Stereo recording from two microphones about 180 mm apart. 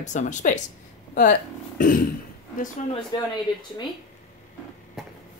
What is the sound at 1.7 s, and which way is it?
Speech, 50° left (ahead or behind).